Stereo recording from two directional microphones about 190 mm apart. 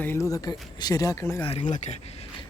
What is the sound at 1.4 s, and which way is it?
Speech, 25° left (ahead or behind).